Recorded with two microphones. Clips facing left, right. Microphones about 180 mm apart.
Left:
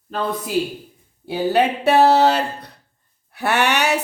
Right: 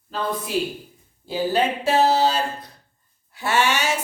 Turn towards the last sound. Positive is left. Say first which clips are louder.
# left 3 dB
turn(degrees=65)  # may be behind; listen again after turning